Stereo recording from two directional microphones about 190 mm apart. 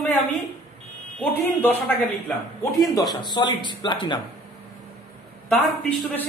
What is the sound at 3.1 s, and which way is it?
Speech, 20° left (ahead or behind).